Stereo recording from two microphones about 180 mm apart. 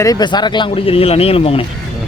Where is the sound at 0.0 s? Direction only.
20° left (ahead or behind).